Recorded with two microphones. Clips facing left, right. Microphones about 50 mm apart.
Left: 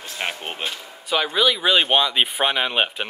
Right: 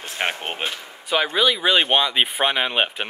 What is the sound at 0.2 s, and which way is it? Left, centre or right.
Speech, right.